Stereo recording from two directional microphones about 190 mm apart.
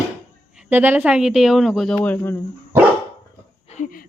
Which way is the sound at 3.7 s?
45° left (ahead or behind).